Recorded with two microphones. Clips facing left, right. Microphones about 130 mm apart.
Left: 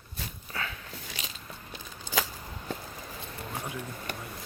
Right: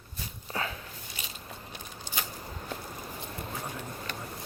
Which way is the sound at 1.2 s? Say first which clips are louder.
Right 1 dB; 90° left.